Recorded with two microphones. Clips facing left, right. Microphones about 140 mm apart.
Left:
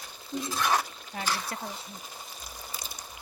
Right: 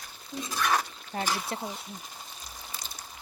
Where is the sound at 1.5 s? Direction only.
25° right (ahead or behind).